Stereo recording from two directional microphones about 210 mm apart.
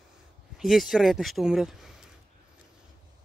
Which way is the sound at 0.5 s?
Centre (ahead or behind).